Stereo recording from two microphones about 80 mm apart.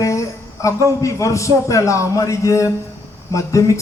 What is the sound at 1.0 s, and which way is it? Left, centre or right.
A man's voice, left.